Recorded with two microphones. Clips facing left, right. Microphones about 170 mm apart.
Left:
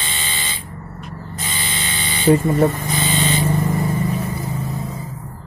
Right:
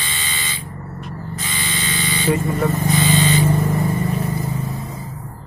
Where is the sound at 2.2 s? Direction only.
45° left (ahead or behind).